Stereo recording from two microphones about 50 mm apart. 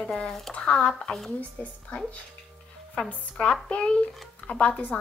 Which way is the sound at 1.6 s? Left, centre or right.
Left.